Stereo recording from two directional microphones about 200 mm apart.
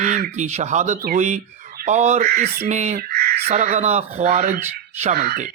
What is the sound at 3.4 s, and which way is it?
Speech, 35° right (ahead or behind).